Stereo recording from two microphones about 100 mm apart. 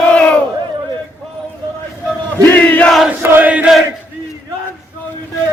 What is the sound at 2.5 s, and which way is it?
Battle cry, 15° left (ahead or behind).